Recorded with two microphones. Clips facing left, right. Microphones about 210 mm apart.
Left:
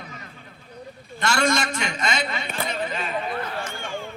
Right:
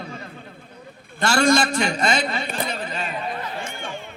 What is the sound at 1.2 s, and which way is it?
A man's voice, 30° right (ahead or behind).